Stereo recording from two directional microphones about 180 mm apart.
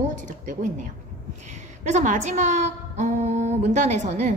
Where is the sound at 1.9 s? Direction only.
40° right (ahead or behind).